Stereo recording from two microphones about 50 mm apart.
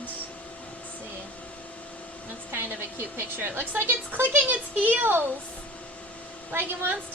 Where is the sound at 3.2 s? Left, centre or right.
Right.